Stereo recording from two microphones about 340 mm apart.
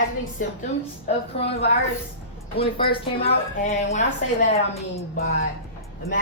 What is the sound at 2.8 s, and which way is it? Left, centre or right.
A woman's voice, left.